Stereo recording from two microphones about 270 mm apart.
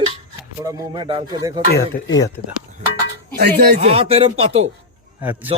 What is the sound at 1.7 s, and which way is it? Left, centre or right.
Speech, left.